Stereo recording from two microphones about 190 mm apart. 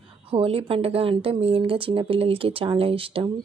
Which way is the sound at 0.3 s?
30° right (ahead or behind).